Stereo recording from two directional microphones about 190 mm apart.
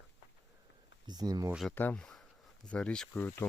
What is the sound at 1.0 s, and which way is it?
Speech, 20° right (ahead or behind).